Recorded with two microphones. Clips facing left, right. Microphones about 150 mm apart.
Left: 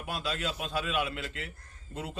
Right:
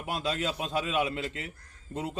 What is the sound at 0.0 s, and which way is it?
A man's voice, 25° right (ahead or behind).